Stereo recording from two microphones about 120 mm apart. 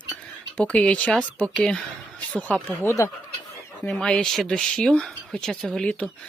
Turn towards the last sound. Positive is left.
turn(degrees=10)  # may be behind; listen again after turning